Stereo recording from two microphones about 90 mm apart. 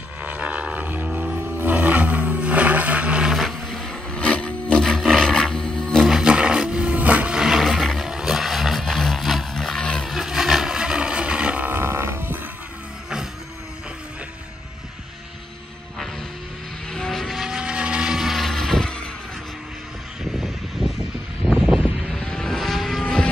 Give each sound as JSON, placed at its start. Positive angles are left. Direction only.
{"t": 0.2, "sound": "roar", "side_deg": -15}
{"t": 3.3, "sound": "roaring cats", "side_deg": 5}
{"t": 6.0, "sound": "vehicle", "side_deg": -10}
{"t": 10.1, "sound": "boat", "side_deg": -5}
{"t": 16.9, "sound": "vehicle", "side_deg": 5}
{"t": 21.5, "sound": "a sound", "side_deg": -5}
{"t": 22.0, "sound": "vehicle", "side_deg": 5}